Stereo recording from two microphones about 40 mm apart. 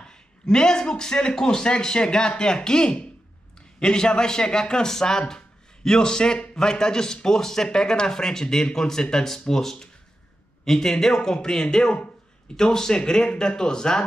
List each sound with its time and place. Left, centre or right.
0.5 s a man's voice: centre